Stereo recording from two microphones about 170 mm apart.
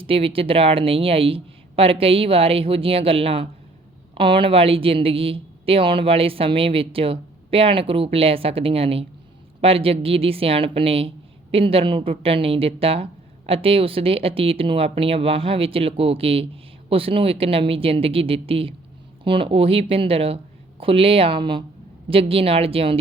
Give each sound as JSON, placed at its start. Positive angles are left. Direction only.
{"t": 0.0, "sound": "speech", "side_deg": -30}